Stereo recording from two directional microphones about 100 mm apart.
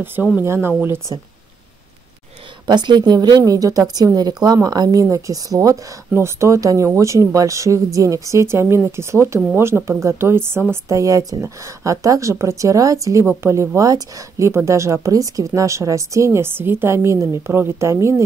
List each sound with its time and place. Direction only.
0.0 s speech: 20° right (ahead or behind)
2.6 s speech: 50° right (ahead or behind); by 18.2 s 25° right (ahead or behind)